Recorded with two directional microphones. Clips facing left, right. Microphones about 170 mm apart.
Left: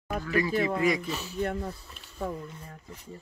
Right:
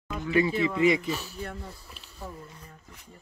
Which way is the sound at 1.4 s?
50° left (ahead or behind).